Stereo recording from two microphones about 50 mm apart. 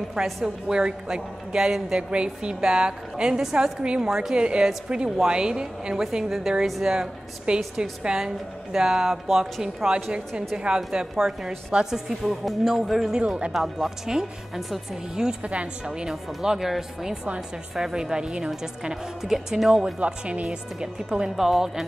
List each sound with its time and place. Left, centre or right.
0.2 s a woman's voice: centre
4.1 s a woman's voice: centre
8.7 s a woman's voice: centre
15.4 s a woman's voice: right
20.0 s a woman's voice: right; by 21.8 s centre